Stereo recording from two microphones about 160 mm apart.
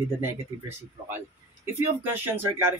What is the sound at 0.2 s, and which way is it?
Speech, 15° right (ahead or behind).